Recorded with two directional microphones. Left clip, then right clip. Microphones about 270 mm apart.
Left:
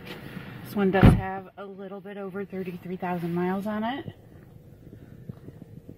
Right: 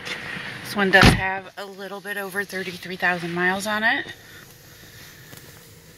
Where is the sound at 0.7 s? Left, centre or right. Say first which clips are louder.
Right 7 dB; centre.